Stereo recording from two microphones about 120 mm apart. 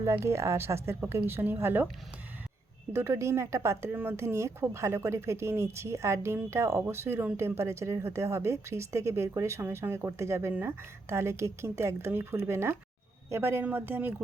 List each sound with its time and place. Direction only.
0.0 s speech: 20° right (ahead or behind)
2.9 s speech: 25° right (ahead or behind)